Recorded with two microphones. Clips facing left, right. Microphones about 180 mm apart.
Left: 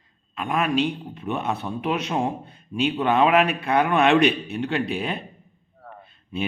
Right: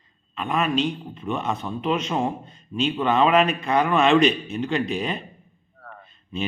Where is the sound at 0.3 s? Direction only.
10° left (ahead or behind).